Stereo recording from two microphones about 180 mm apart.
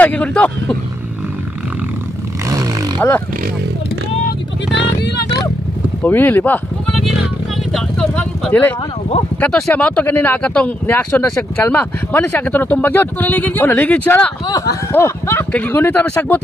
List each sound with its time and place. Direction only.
0.0 s speech: 10° left (ahead or behind)
3.0 s speech: 10° left (ahead or behind)
4.7 s speech: 70° left (ahead or behind)
6.0 s speech: 10° left (ahead or behind)
7.7 s vehicle: 5° left (ahead or behind)
9.4 s speech: 5° left (ahead or behind)